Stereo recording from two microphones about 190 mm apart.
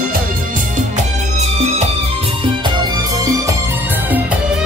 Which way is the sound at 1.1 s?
35° right (ahead or behind).